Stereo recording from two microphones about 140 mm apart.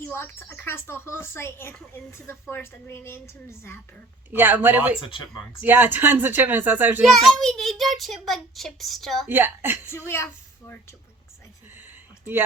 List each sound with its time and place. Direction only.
0.1 s a woman's voice: 15° left (ahead or behind)
4.3 s speech: 15° right (ahead or behind)
7.0 s a child's voice: centre (ahead or behind)
9.2 s speech: 15° right (ahead or behind)
9.9 s a woman's voice: 20° left (ahead or behind)
12.2 s speech: 15° right (ahead or behind)